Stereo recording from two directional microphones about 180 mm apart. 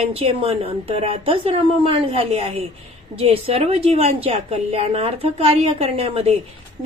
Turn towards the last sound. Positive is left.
turn(degrees=-35)  # may be behind; listen again after turning